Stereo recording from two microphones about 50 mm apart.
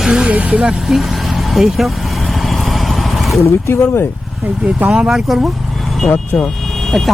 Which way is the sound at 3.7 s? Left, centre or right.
Left.